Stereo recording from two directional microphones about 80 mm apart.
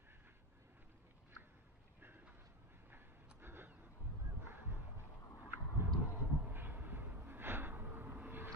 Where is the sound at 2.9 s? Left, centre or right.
Right.